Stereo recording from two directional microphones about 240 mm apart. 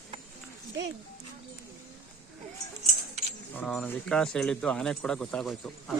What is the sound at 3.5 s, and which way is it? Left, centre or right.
Speech, centre.